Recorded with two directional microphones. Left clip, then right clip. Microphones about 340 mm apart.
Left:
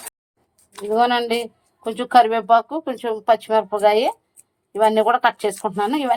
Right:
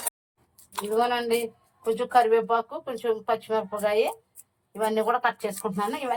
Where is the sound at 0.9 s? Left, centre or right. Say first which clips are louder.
Left 6 dB; centre.